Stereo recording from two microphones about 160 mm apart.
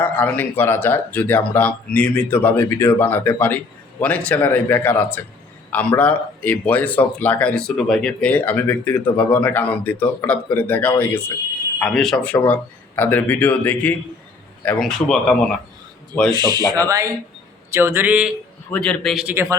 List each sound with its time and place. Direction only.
0.0 s speech: 10° left (ahead or behind)
16.3 s a man's voice: 25° right (ahead or behind); by 18.3 s 10° right (ahead or behind)
18.7 s speech: 5° left (ahead or behind); by 19.5 s 15° right (ahead or behind)